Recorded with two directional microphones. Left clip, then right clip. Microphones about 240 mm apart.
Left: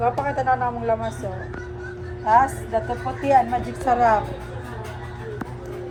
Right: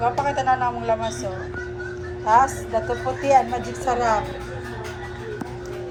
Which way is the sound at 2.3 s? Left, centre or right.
Centre.